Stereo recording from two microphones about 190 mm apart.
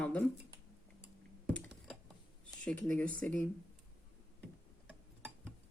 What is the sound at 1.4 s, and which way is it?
Computer keyboard, 5° left (ahead or behind).